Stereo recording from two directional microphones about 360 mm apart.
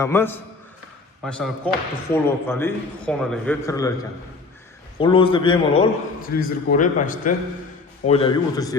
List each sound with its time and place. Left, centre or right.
0.0 s a man's voice: centre